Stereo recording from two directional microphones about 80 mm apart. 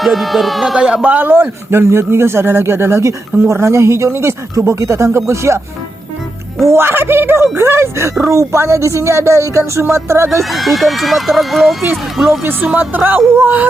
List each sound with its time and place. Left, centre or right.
0.0 s speech: centre; by 10.2 s right
10.5 s speech: centre
12.4 s speech: right